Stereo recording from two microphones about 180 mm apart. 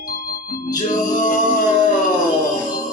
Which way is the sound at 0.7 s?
45° left (ahead or behind).